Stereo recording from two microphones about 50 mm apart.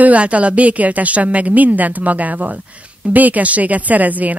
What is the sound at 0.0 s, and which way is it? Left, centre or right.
Speech, right.